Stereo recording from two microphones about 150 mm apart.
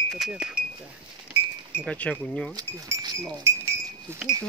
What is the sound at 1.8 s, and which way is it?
Speech, 10° left (ahead or behind).